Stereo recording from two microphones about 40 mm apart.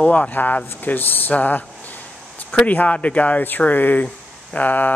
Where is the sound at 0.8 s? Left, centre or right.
Left.